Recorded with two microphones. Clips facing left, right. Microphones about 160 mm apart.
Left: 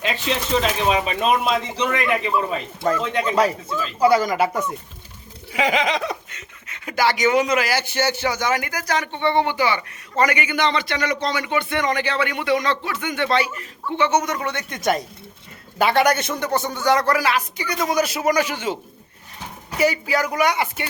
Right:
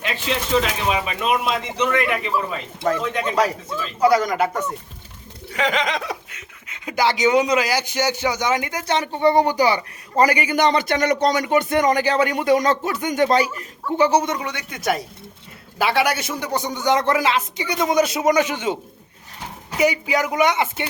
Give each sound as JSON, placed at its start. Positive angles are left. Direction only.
{"t": 0.6, "sound": "speech", "side_deg": 30}
{"t": 2.8, "sound": "speech", "side_deg": 0}
{"t": 5.5, "sound": "a sound", "side_deg": 10}
{"t": 6.7, "sound": "speech", "side_deg": -20}
{"t": 14.3, "sound": "speech", "side_deg": -15}
{"t": 19.8, "sound": "speech", "side_deg": -20}